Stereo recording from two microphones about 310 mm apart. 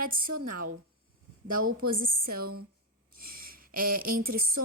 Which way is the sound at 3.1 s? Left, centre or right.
Right.